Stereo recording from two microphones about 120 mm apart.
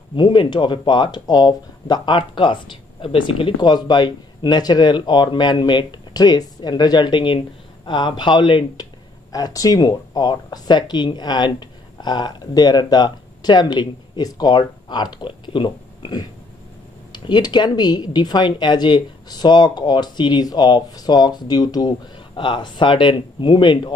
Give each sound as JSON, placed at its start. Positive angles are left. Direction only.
{"t": 0.1, "sound": "speech", "side_deg": 40}
{"t": 9.3, "sound": "speech", "side_deg": 30}